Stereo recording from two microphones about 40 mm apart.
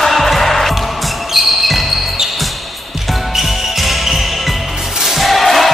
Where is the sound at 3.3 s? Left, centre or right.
Centre.